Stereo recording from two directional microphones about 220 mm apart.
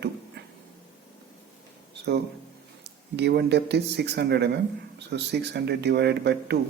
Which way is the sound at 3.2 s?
50° right (ahead or behind).